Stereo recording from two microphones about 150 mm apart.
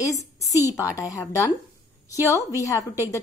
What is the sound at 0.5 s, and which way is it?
A woman's voice, 20° left (ahead or behind).